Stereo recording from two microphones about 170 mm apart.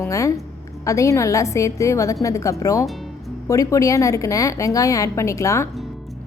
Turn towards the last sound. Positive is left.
turn(degrees=20)  # may be behind; listen again after turning